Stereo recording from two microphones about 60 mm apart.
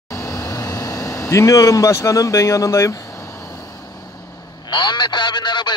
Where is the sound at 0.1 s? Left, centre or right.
Left.